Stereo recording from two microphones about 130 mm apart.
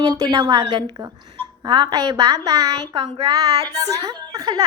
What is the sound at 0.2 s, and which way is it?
A woman's voice, 30° right (ahead or behind).